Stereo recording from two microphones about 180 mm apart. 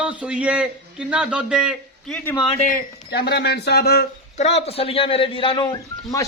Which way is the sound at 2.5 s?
45° left (ahead or behind).